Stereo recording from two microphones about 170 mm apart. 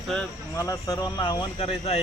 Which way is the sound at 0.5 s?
20° left (ahead or behind).